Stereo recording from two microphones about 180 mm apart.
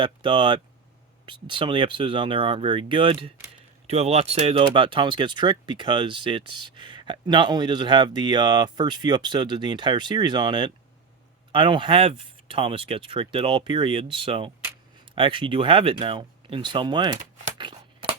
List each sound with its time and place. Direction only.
0.0 s speech: 25° right (ahead or behind)
17.2 s speech: 40° right (ahead or behind)
17.6 s a sound: 25° right (ahead or behind)